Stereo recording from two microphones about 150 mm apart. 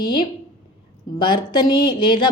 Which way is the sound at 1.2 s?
30° left (ahead or behind).